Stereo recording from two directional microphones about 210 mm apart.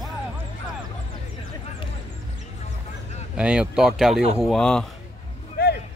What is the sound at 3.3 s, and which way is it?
Speech, 5° right (ahead or behind).